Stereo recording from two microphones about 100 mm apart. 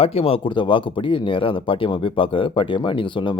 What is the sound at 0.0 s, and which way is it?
Speech, 80° left.